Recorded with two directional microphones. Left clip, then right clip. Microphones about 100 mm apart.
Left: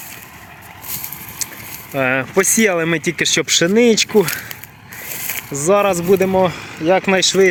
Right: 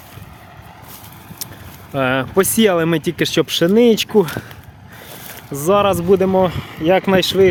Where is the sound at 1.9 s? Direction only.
20° right (ahead or behind).